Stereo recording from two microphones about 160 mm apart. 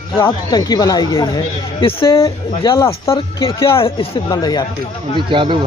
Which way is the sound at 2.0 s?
20° left (ahead or behind).